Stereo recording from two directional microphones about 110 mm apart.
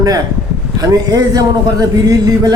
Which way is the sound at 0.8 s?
35° right (ahead or behind).